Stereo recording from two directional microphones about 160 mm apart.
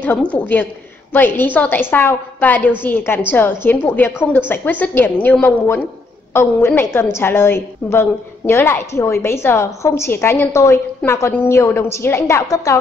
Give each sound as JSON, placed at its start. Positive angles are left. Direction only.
{"t": 0.0, "sound": "a woman's voice", "side_deg": 10}